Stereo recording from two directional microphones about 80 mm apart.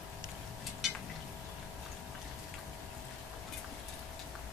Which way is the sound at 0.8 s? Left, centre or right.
Centre.